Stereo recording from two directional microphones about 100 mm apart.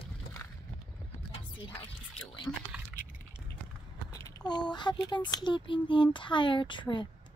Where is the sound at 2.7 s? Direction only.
10° right (ahead or behind).